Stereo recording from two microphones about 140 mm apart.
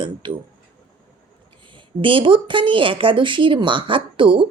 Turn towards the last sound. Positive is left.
turn(degrees=-35)  # may be behind; listen again after turning